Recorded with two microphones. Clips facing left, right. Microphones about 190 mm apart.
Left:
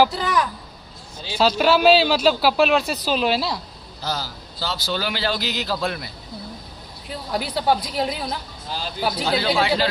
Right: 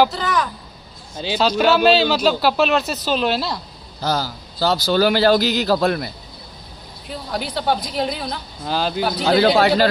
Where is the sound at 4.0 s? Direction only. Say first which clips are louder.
Right 6 dB; 45° right (ahead or behind).